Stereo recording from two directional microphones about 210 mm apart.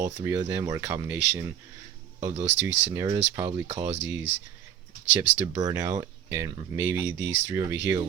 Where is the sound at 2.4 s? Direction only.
60° right (ahead or behind).